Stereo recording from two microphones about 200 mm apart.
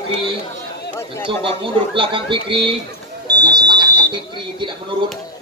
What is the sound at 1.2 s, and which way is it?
Speech, 25° right (ahead or behind).